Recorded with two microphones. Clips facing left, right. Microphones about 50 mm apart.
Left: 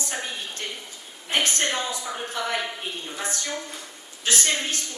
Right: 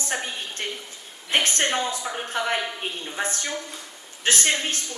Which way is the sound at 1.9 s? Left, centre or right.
Right.